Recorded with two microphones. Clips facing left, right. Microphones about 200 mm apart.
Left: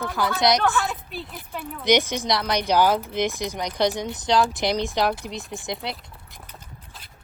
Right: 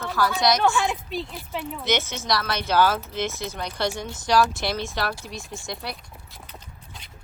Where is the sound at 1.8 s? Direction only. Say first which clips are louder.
Left 7 dB; 15° left (ahead or behind).